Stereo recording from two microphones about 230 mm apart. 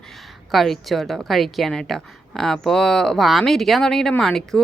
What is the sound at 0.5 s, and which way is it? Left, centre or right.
A woman's voice, centre.